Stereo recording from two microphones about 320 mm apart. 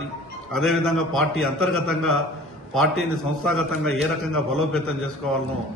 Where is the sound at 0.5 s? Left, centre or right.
Centre.